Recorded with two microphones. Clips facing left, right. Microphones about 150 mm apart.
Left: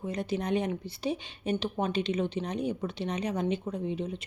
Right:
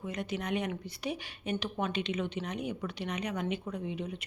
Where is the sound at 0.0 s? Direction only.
30° left (ahead or behind).